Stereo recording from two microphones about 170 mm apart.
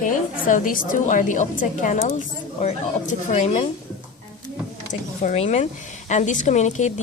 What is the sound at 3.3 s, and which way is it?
Speech, 40° left (ahead or behind).